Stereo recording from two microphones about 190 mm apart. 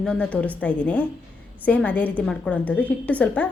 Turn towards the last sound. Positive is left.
turn(degrees=5)  # may be behind; listen again after turning